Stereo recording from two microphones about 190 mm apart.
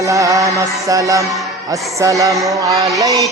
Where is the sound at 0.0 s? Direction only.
15° right (ahead or behind).